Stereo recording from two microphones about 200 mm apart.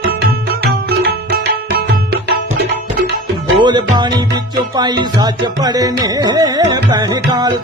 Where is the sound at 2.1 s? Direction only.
55° right (ahead or behind).